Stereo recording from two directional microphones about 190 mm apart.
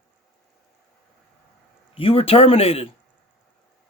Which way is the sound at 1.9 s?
30° left (ahead or behind).